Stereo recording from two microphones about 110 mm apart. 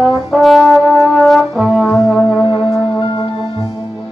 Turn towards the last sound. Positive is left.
turn(degrees=45)  # may be behind; listen again after turning